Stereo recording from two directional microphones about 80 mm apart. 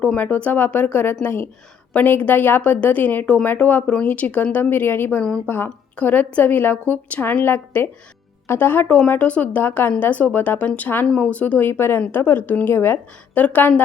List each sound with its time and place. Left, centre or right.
0.2 s a woman's voice: centre
11.7 s a woman's voice: left
13.3 s a woman's voice: centre